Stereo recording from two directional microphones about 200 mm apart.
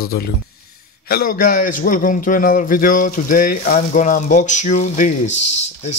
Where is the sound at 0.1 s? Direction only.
55° left (ahead or behind).